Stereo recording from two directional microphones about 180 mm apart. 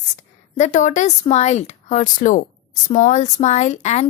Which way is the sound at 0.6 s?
40° left (ahead or behind).